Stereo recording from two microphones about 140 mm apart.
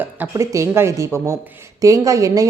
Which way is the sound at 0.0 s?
15° right (ahead or behind).